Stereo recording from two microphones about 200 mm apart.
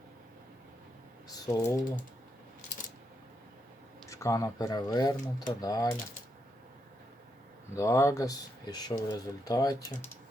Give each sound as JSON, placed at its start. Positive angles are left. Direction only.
{"t": 1.3, "sound": "speech", "side_deg": 20}
{"t": 4.1, "sound": "speech", "side_deg": 15}
{"t": 7.8, "sound": "speech", "side_deg": 15}